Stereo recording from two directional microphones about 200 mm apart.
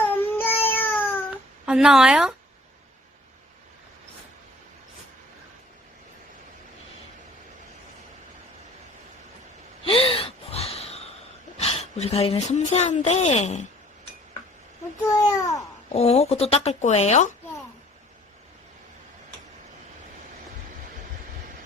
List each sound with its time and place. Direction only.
0.3 s a sound: 10° left (ahead or behind)
1.6 s speech: 5° right (ahead or behind)
9.8 s gasp: 25° left (ahead or behind)
11.6 s a woman's voice: 30° left (ahead or behind)
15.1 s a child's voice: 15° left (ahead or behind)
15.9 s a woman's voice: 30° left (ahead or behind)